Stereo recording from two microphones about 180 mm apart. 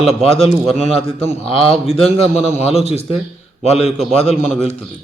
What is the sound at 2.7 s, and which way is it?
Speech, 35° left (ahead or behind).